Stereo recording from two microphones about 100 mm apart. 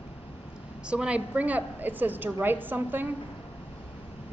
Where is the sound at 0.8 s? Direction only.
10° right (ahead or behind).